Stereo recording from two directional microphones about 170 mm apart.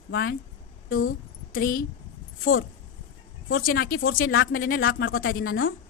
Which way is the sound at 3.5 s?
60° left (ahead or behind).